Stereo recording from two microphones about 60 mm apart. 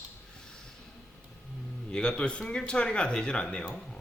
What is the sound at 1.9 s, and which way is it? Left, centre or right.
Speech, centre.